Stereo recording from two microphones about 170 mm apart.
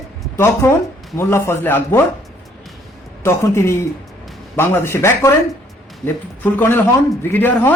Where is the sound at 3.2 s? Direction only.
15° left (ahead or behind).